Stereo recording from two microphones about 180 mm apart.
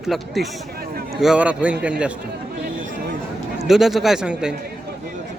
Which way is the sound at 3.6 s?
Centre (ahead or behind).